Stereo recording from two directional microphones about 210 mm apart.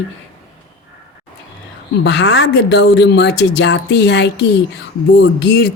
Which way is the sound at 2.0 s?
55° left (ahead or behind).